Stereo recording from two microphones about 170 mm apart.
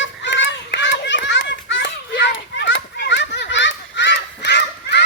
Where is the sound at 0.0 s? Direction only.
90° left.